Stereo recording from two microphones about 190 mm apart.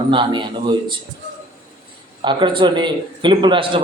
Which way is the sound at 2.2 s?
25° right (ahead or behind).